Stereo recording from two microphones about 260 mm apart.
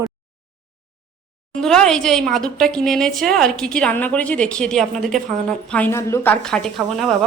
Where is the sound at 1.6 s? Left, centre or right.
Centre.